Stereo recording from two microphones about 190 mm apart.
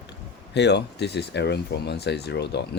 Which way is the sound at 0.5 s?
65° left (ahead or behind).